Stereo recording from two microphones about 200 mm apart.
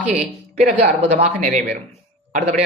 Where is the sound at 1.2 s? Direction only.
40° right (ahead or behind).